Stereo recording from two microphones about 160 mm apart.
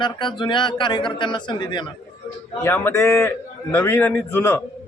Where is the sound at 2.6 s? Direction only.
15° left (ahead or behind).